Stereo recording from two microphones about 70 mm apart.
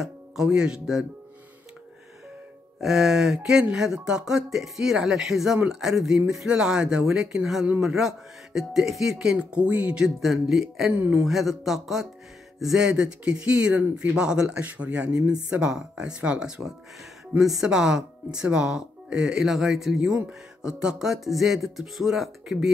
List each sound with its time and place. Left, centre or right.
0.0 s speech: centre
2.8 s music: centre
3.7 s speech: centre
10.0 s music: centre
10.9 s speech: right
11.2 s music: centre
12.5 s speech: centre
20.2 s music: centre